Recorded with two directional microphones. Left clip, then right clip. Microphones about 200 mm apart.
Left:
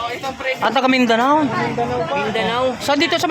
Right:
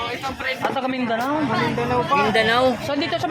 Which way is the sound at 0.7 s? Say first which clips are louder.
Left 8 dB; 50° left (ahead or behind).